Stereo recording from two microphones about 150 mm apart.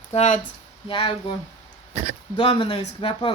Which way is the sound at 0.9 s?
30° left (ahead or behind).